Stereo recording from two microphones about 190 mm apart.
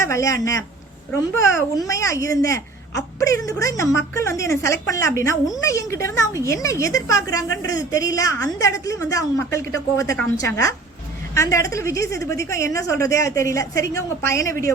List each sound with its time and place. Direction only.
0.0 s a woman's voice: 15° left (ahead or behind)